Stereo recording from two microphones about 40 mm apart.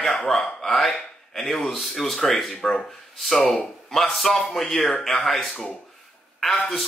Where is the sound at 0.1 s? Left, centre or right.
Centre.